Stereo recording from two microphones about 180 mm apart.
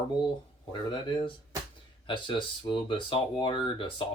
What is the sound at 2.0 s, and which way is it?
Speech, 25° left (ahead or behind).